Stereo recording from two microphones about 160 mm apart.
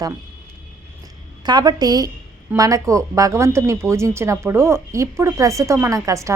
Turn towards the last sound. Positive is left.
turn(degrees=-20)  # may be behind; listen again after turning